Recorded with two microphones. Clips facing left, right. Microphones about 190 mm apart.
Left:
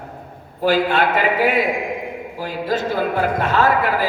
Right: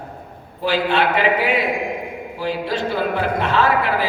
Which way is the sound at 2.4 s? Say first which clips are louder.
Even; 45° left (ahead or behind).